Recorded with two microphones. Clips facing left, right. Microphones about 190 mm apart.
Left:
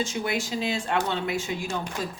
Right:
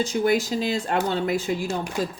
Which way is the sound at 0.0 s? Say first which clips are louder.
Right 6 dB; 40° right (ahead or behind).